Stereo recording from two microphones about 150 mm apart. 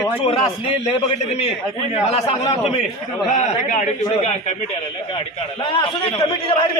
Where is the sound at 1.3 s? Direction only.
45° left (ahead or behind).